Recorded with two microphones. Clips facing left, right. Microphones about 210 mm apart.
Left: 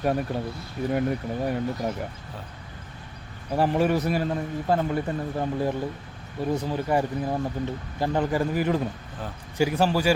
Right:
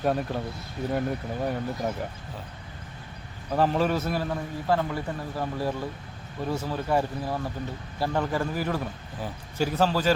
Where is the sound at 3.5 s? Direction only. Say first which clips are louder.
Left 1 dB; 15° left (ahead or behind).